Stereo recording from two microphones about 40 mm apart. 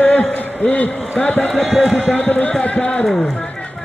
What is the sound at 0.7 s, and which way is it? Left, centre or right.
Speech, left.